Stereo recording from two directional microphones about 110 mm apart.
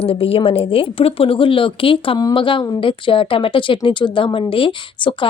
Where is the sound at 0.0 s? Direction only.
60° left (ahead or behind).